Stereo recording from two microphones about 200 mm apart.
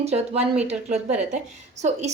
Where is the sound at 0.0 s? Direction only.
30° right (ahead or behind).